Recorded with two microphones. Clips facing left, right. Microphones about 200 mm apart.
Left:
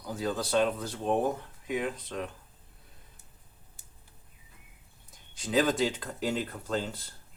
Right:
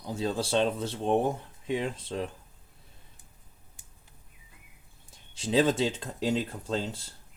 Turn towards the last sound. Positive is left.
turn(degrees=-25)  # may be behind; listen again after turning